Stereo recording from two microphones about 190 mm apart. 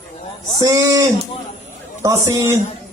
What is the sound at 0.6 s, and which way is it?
A man's voice, 15° right (ahead or behind).